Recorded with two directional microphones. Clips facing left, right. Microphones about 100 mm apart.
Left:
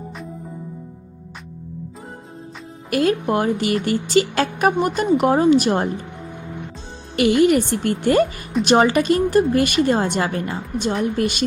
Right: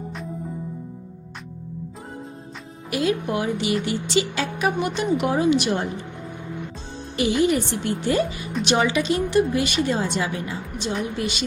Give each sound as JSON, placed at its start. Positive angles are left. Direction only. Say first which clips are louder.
{"t": 2.9, "sound": "a woman's voice", "louder": "left 4 dB", "side_deg": 50}
{"t": 7.4, "sound": "a woman's voice", "louder": "left 5 dB", "side_deg": 55}